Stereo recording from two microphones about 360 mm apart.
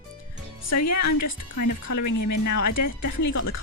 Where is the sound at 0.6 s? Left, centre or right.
Left.